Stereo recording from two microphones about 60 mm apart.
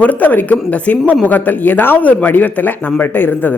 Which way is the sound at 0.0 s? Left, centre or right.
Left.